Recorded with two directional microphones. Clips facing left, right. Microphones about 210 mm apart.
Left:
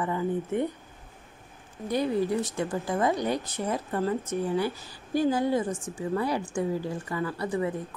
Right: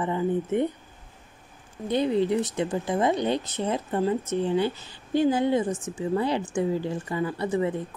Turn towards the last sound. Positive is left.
turn(degrees=-25)  # may be behind; listen again after turning